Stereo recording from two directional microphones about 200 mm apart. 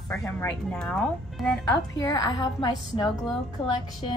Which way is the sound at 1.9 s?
20° left (ahead or behind).